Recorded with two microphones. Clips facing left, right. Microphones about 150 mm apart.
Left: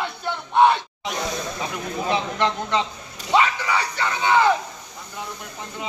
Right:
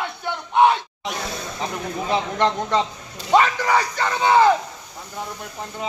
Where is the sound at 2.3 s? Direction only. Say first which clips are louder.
Right 2 dB; 40° right (ahead or behind).